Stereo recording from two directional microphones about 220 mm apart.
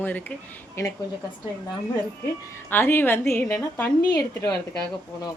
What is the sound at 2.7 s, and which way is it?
Speech, 10° left (ahead or behind).